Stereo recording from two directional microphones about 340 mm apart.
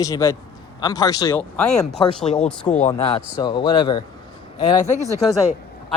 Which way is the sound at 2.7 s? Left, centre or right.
Centre.